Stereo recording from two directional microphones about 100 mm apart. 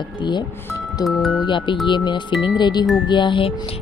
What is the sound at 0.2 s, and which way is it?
Speech, 50° left (ahead or behind).